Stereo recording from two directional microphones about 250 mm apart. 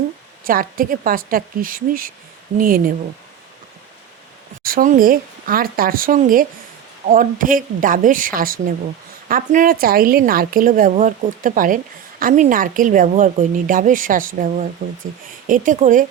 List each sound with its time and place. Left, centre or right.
0.4 s speech: right
4.6 s speech: right